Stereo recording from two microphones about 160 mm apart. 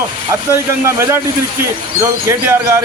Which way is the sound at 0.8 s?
15° right (ahead or behind).